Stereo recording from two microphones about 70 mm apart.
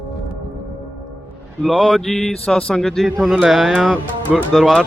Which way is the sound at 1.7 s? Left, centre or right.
Centre.